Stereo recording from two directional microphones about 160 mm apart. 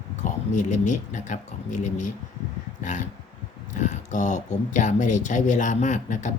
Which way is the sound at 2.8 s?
50° left (ahead or behind).